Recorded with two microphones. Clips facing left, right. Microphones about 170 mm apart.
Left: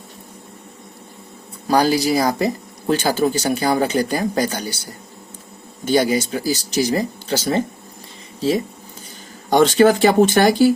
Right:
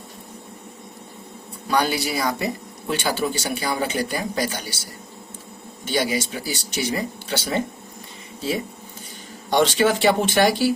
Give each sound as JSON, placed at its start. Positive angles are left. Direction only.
{"t": 1.6, "sound": "speech", "side_deg": 35}
{"t": 5.8, "sound": "speech", "side_deg": 45}
{"t": 9.5, "sound": "speech", "side_deg": 45}